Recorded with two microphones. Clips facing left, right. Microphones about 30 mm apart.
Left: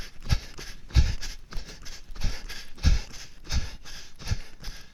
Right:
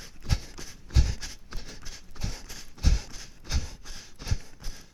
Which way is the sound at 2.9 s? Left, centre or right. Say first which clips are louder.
Left 1 dB; centre.